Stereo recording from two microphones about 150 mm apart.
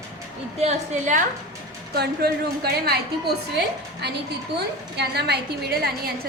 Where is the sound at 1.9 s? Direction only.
90° right.